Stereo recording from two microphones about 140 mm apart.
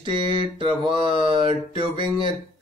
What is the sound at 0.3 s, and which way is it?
A man's voice, 40° right (ahead or behind).